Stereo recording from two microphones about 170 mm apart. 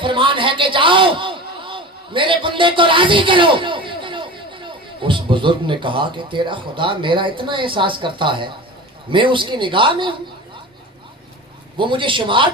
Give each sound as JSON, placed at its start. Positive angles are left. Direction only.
{"t": 0.0, "sound": "a man's voice", "side_deg": -30}
{"t": 11.8, "sound": "speech", "side_deg": -30}